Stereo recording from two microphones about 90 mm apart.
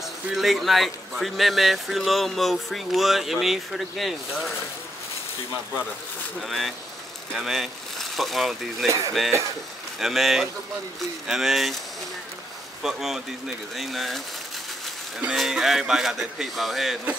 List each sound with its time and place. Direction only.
0.3 s speech: centre (ahead or behind)
6.4 s speech: centre (ahead or behind)
8.8 s speech: 35° right (ahead or behind)
9.9 s speech: centre (ahead or behind)
12.8 s speech: 5° right (ahead or behind)
15.2 s speech: 5° right (ahead or behind)